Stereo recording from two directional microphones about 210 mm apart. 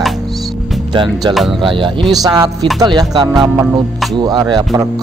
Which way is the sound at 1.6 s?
25° right (ahead or behind).